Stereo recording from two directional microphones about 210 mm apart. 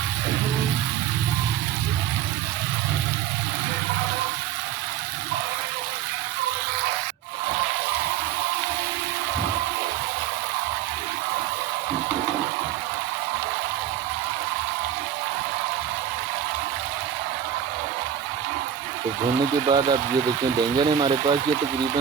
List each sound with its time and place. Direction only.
19.6 s speech: 20° right (ahead or behind)